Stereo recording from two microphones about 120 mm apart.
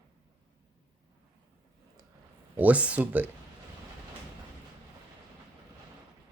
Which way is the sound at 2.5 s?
10° right (ahead or behind).